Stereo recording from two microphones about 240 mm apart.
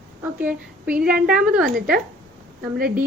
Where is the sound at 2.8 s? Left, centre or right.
Right.